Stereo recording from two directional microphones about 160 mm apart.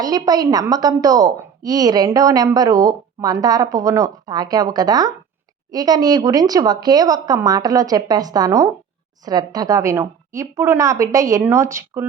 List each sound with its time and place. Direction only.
0.0 s a woman's voice: 25° right (ahead or behind)